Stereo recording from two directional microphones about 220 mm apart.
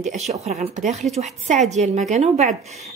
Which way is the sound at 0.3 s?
30° right (ahead or behind).